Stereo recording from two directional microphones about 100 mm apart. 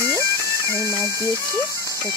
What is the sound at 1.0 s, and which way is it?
Speech, 30° left (ahead or behind).